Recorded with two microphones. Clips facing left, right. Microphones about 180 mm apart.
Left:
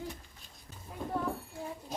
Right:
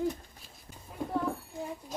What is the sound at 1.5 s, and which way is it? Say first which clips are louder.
Speech: right 3 dB; 20° right (ahead or behind).